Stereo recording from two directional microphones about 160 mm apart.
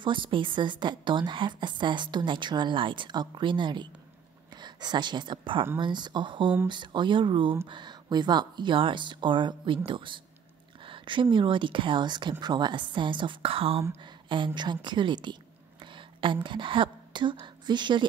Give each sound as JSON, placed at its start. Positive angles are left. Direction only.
{"t": 0.0, "sound": "a woman's voice", "side_deg": -30}